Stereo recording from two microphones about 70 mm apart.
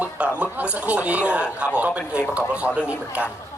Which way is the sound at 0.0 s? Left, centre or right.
Centre.